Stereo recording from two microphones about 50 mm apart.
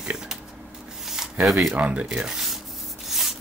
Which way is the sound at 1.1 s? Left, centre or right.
Centre.